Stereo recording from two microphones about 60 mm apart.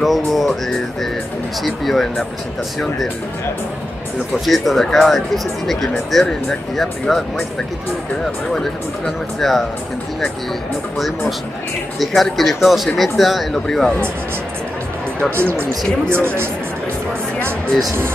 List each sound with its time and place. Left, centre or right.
0.0 s speech: centre
1.6 s speech: centre
4.5 s speech: centre
9.0 s speech: centre
11.0 s speech: centre
15.3 s speech: right